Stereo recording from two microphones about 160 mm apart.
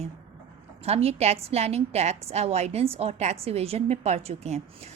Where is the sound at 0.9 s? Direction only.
40° right (ahead or behind).